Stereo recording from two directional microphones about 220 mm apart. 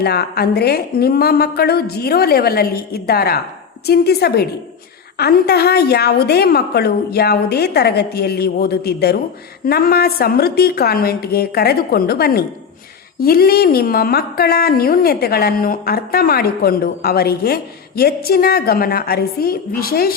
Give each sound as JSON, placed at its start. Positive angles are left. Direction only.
{"t": 0.0, "sound": "speech", "side_deg": 45}